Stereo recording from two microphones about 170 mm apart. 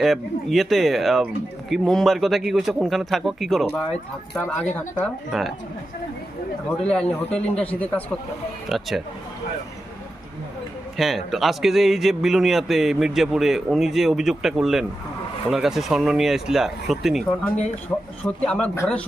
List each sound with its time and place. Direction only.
0.0 s a man's voice: centre (ahead or behind)
6.9 s a man's voice: 5° left (ahead or behind)
10.9 s a man's voice: centre (ahead or behind)
17.9 s a man's voice: 10° left (ahead or behind)